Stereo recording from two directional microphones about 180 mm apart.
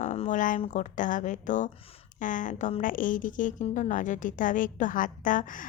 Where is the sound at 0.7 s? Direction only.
45° left (ahead or behind).